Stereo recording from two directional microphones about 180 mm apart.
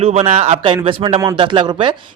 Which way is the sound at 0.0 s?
35° right (ahead or behind).